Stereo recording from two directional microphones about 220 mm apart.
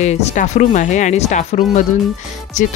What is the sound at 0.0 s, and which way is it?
Speech, 30° left (ahead or behind).